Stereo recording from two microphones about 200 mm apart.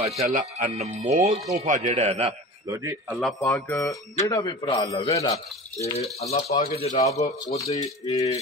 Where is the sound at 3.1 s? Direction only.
Centre (ahead or behind).